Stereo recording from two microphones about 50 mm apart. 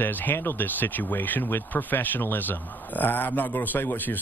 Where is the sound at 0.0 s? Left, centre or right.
Left.